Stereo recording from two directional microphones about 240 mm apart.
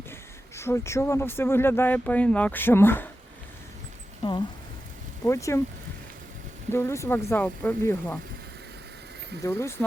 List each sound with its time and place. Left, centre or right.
0.1 s speech: centre
4.2 s speech: centre
6.7 s speech: centre
9.4 s speech: centre